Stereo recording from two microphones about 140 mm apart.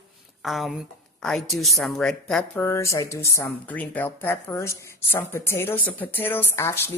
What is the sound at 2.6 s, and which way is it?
A woman's voice, 20° left (ahead or behind).